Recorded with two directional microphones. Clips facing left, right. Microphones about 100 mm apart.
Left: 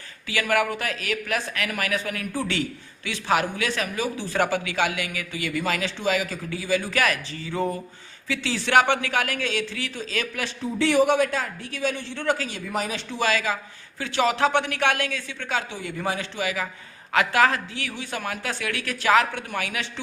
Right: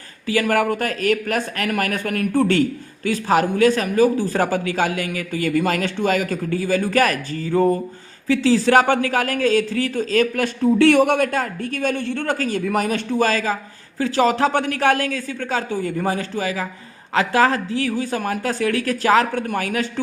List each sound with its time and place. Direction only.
0.3 s a woman's voice: 40° right (ahead or behind)